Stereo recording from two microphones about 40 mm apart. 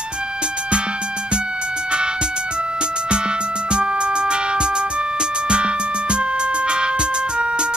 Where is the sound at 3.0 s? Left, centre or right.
Right.